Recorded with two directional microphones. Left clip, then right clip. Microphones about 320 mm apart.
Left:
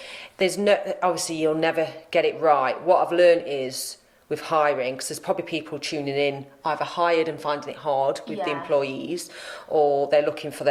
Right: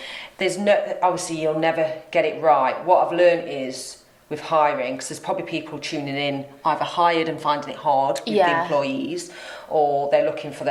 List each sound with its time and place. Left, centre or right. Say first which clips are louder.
0.3 s speech: right 1 dB; left